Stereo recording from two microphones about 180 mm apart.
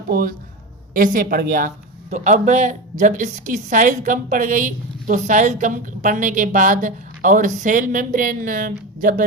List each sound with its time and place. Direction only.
0.1 s speech: 50° right (ahead or behind)